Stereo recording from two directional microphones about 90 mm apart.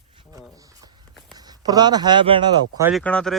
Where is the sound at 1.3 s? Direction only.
45° right (ahead or behind); by 2.4 s 65° right (ahead or behind).